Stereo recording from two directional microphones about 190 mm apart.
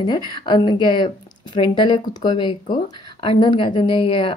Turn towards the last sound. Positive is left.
turn(degrees=30)  # may be behind; listen again after turning